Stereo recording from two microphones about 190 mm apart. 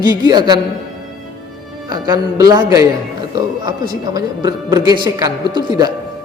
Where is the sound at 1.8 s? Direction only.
20° right (ahead or behind).